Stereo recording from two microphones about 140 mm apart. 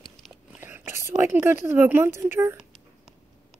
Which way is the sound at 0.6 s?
15° right (ahead or behind).